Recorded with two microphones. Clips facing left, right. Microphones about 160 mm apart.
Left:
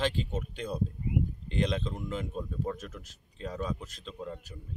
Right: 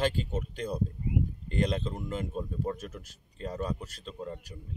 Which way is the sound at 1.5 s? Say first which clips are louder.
Right 2 dB; 45° right (ahead or behind).